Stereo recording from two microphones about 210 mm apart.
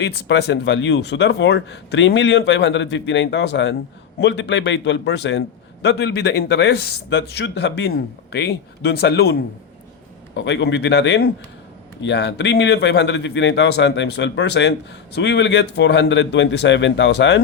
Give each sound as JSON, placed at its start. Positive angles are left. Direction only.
{"t": 0.0, "sound": "speech", "side_deg": 55}